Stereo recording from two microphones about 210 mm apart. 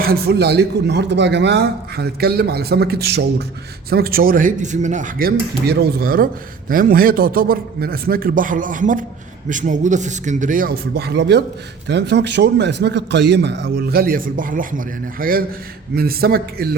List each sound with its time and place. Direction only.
0.0 s a man's voice: 45° right (ahead or behind)